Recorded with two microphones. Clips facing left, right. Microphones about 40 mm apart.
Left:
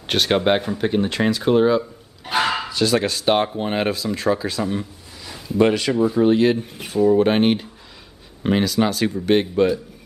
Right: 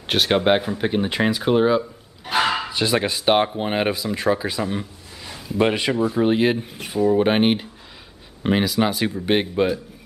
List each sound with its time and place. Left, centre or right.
0.0 s speech: centre
2.2 s dog: centre
2.7 s speech: right
5.3 s a sound: centre
5.7 s speech: centre